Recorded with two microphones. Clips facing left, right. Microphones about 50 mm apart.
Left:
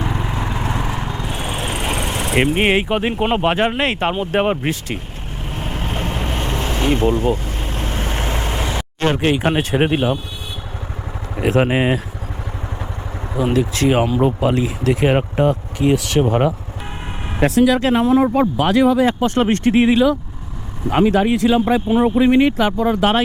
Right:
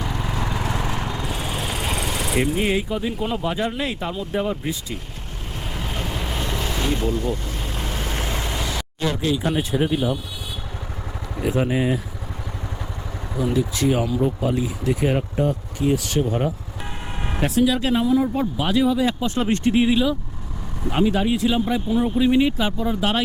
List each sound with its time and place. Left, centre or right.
0.0 s lawn mower: left
1.3 s vehicle: left
2.3 s speech: left
5.5 s vehicle: left
7.4 s vehicle: left
9.0 s speech: left
11.5 s speech: left
13.3 s speech: left
16.2 s speech: left
22.3 s speech: left